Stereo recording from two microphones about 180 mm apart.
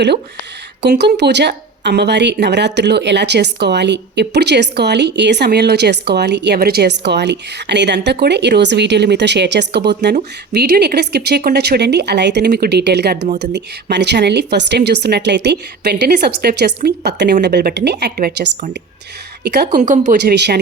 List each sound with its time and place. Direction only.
0.8 s a woman's voice: 70° right (ahead or behind)
13.9 s a woman's voice: 70° right (ahead or behind)
19.7 s speech: 45° right (ahead or behind)
20.1 s speech: 65° right (ahead or behind)